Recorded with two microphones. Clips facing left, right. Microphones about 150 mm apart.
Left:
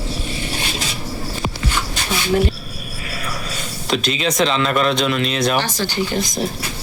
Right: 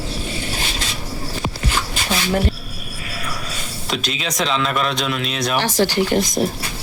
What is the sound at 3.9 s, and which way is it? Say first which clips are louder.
A man's voice: left 5 dB; centre (ahead or behind).